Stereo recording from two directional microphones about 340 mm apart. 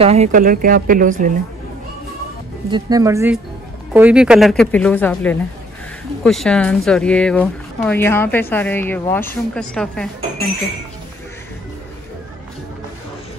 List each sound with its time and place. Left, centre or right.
0.0 s speech: centre
2.7 s speech: centre